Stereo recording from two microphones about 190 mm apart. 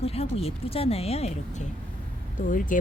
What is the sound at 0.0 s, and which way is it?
Speech, 30° left (ahead or behind).